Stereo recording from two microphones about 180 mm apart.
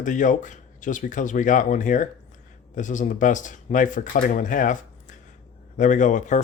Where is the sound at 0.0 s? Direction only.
45° left (ahead or behind).